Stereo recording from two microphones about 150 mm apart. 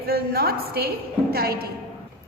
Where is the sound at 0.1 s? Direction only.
90° right.